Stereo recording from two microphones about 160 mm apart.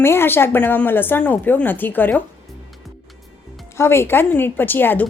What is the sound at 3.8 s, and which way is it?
A woman's voice, 15° left (ahead or behind).